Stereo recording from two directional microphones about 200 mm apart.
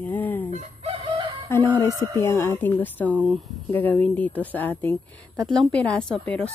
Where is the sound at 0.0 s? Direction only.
10° left (ahead or behind).